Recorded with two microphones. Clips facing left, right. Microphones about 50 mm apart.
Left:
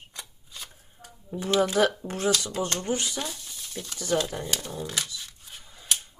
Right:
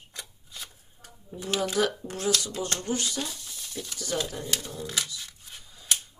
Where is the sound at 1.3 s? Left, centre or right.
Left.